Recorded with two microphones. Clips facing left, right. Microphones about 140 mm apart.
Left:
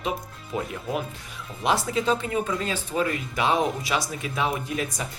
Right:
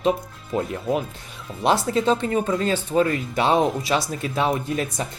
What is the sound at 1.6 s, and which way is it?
Speech, 30° right (ahead or behind).